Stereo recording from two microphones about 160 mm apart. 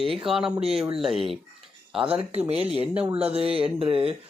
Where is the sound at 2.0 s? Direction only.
40° right (ahead or behind).